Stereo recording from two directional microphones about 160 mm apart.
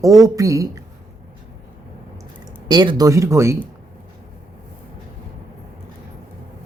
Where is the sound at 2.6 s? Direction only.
25° right (ahead or behind).